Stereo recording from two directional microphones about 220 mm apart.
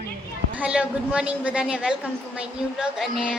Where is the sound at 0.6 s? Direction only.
5° right (ahead or behind).